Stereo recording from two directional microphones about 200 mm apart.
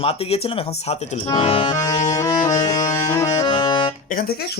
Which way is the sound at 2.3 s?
35° left (ahead or behind).